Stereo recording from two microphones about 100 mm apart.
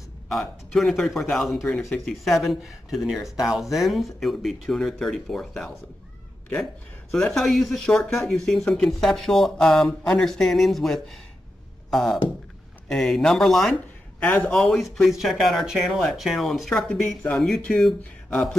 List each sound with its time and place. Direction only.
0.3 s speech: centre (ahead or behind)
14.2 s a man's voice: 20° left (ahead or behind)
14.5 s speech: centre (ahead or behind)